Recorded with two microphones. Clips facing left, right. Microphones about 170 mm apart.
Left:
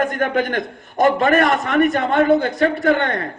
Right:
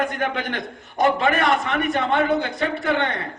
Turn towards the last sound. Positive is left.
turn(degrees=45)  # may be behind; listen again after turning